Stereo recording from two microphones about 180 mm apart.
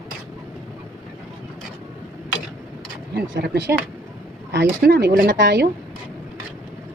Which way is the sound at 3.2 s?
65° right (ahead or behind).